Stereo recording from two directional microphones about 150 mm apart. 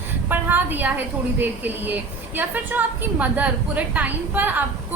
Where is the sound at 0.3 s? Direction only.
15° right (ahead or behind).